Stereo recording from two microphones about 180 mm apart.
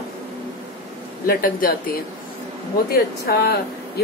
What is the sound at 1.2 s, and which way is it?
Speech, 50° left (ahead or behind).